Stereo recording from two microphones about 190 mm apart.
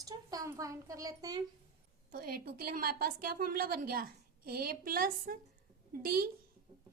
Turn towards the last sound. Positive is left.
turn(degrees=-50)  # may be behind; listen again after turning